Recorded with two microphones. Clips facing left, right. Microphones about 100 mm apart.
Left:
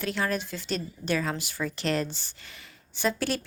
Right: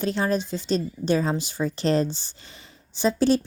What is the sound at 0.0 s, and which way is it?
A woman's voice, 30° right (ahead or behind).